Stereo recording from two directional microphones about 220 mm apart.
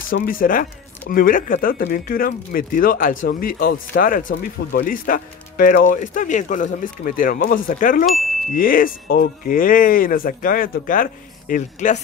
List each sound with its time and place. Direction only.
0.1 s speech: 40° left (ahead or behind)